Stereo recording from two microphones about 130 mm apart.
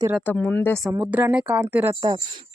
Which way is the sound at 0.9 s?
15° right (ahead or behind).